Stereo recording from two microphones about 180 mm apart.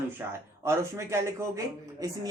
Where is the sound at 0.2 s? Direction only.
15° right (ahead or behind).